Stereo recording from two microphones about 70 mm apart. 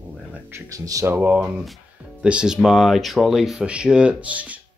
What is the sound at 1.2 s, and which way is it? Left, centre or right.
Speech, right.